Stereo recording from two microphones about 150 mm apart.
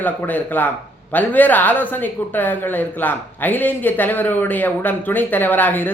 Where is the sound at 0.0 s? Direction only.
10° left (ahead or behind).